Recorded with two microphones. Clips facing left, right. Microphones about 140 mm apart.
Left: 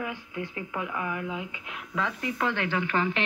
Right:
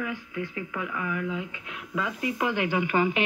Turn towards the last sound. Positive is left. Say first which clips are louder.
# right 3 dB
turn(degrees=-10)  # may be behind; listen again after turning